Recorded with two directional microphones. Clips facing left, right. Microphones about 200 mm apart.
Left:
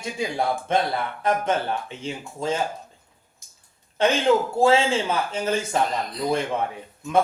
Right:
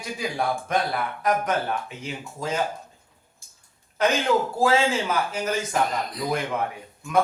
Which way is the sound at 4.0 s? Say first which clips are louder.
Left 2 dB; 30° left (ahead or behind).